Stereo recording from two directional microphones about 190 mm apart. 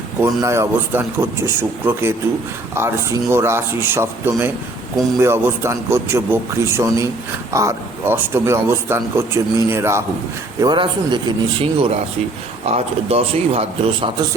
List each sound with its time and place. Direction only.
0.2 s speech: 15° right (ahead or behind)
10.6 s speech: 25° right (ahead or behind)